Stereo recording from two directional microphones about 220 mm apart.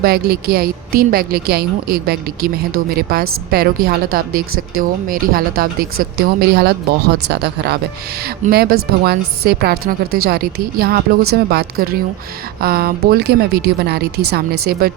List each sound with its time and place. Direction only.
0.0 s a woman's voice: 45° right (ahead or behind)